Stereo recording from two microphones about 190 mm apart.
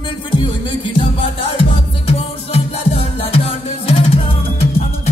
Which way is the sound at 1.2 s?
30° left (ahead or behind).